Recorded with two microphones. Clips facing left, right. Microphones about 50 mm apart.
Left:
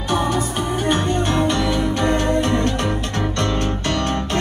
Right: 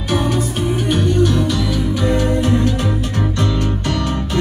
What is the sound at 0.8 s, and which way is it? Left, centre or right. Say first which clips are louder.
Music: right 3 dB; left.